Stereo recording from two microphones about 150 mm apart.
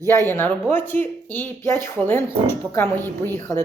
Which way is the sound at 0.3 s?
15° left (ahead or behind).